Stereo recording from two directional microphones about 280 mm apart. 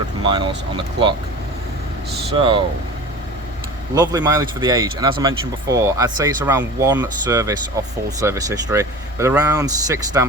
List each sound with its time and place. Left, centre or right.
0.2 s speech: centre
2.4 s speech: centre
3.9 s speech: centre